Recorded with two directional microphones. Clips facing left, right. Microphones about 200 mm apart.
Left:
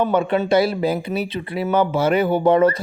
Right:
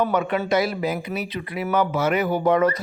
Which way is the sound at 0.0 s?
30° left (ahead or behind).